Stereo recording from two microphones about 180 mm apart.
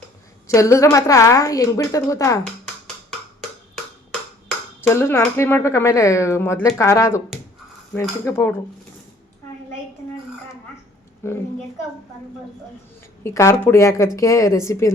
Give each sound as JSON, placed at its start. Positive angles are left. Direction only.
{"t": 0.4, "sound": "speech", "side_deg": 15}
{"t": 4.8, "sound": "speech", "side_deg": 15}
{"t": 11.2, "sound": "speech", "side_deg": 15}
{"t": 13.2, "sound": "speech", "side_deg": 15}